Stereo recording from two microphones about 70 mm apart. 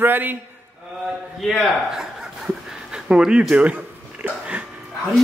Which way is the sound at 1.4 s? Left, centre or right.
Centre.